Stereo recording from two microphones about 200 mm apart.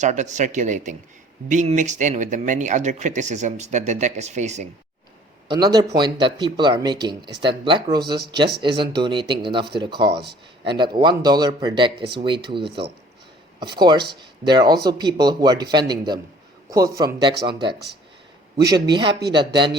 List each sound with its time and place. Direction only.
0.0 s speech: 35° right (ahead or behind)
5.5 s speech: 20° right (ahead or behind)